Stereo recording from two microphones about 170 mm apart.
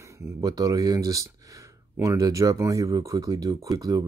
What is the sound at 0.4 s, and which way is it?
Speech, 20° right (ahead or behind).